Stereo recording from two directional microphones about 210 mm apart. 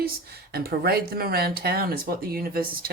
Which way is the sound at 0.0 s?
45° right (ahead or behind).